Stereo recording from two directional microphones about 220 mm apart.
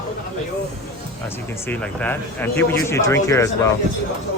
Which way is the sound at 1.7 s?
5° left (ahead or behind).